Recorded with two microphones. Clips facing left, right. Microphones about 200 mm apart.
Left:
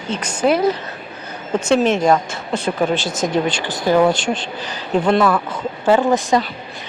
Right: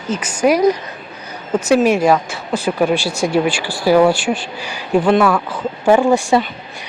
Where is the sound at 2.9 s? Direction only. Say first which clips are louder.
Right 2 dB; 20° left (ahead or behind).